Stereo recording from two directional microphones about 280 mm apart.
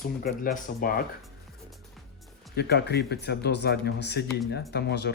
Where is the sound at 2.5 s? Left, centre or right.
Left.